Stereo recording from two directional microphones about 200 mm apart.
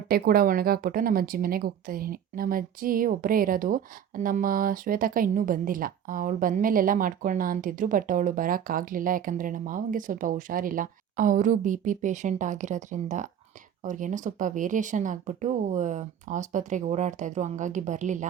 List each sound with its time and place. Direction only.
0.1 s speech: 50° right (ahead or behind)